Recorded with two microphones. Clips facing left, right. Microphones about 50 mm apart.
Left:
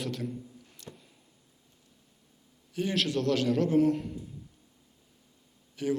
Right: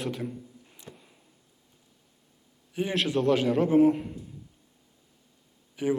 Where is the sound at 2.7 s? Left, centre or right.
Centre.